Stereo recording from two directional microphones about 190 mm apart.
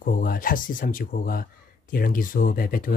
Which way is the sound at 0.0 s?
45° left (ahead or behind).